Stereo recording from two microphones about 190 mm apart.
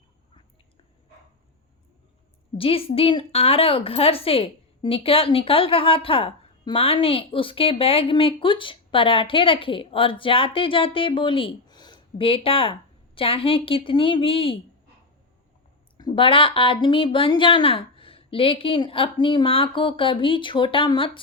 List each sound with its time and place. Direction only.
2.6 s a woman's voice: 30° left (ahead or behind)
16.0 s a woman's voice: 25° left (ahead or behind)